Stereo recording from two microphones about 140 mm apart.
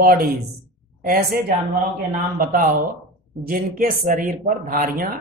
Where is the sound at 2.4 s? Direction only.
85° right.